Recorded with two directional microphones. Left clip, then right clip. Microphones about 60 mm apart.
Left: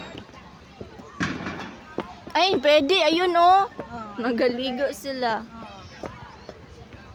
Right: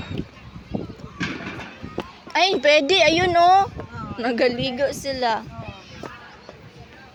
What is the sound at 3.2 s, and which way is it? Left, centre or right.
Speech, left.